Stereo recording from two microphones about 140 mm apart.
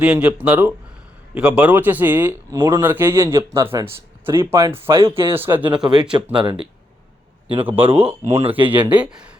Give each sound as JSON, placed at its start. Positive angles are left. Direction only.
{"t": 0.0, "sound": "a man's voice", "side_deg": -10}
{"t": 5.0, "sound": "speech", "side_deg": -40}
{"t": 5.3, "sound": "a man's voice", "side_deg": -15}
{"t": 6.3, "sound": "speech", "side_deg": -35}
{"t": 7.9, "sound": "a man's voice", "side_deg": -15}
{"t": 8.4, "sound": "speech", "side_deg": -40}
{"t": 8.9, "sound": "a man's voice", "side_deg": -10}